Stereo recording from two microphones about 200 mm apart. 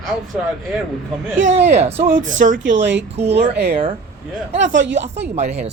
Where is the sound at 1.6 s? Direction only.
30° right (ahead or behind).